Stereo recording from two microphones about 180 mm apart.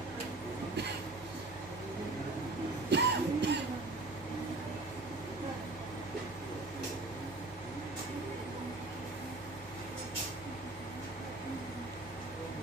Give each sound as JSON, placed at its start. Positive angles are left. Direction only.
{"t": 2.9, "sound": "music", "side_deg": -70}